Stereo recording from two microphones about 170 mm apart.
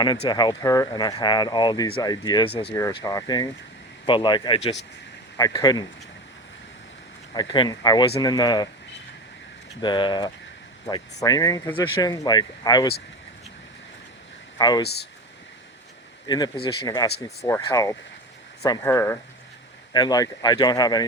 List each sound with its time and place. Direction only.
0.0 s speech: 25° left (ahead or behind)
7.3 s speech: 30° left (ahead or behind)
9.8 s speech: 25° left (ahead or behind)
14.6 s speech: 25° left (ahead or behind)
16.2 s speech: 25° left (ahead or behind)